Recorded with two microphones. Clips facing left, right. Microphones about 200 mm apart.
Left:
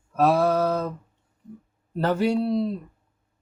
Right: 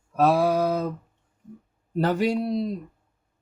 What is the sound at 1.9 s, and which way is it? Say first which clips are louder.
Speech: left 1 dB; 15° right (ahead or behind).